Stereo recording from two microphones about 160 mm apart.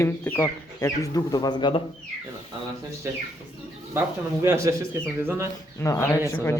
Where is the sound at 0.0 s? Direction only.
15° left (ahead or behind).